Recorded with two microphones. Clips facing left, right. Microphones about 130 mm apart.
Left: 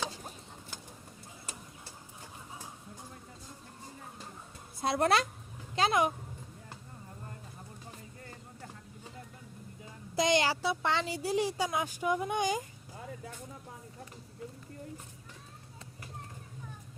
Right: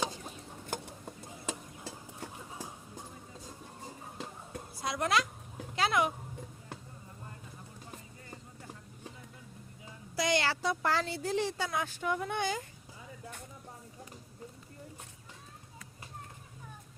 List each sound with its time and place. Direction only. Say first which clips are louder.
4.8 s a woman's voice: left 3 dB; 30° left (ahead or behind)
5.7 s speech: left 2 dB; 25° left (ahead or behind)
10.2 s a child's voice: left 3 dB; 20° left (ahead or behind)
10.6 s speech: even; centre (ahead or behind)
11.0 s speech: left 1 dB; 10° left (ahead or behind)